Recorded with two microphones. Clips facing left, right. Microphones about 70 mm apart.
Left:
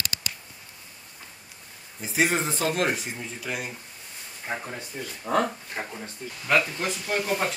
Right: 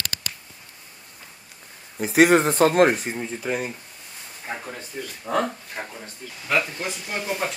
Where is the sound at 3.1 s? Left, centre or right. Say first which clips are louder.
Right 6 dB; right.